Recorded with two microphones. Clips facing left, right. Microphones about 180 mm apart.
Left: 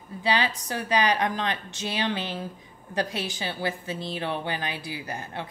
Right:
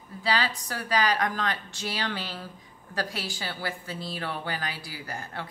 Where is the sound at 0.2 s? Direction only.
20° left (ahead or behind).